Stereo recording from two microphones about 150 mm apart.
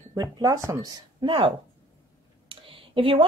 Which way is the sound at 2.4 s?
35° right (ahead or behind).